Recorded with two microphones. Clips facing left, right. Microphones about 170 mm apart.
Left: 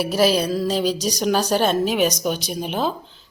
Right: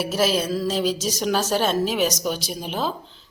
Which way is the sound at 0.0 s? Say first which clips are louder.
Left 3 dB; centre (ahead or behind).